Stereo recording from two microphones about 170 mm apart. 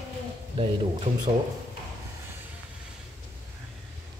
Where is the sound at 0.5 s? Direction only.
30° right (ahead or behind).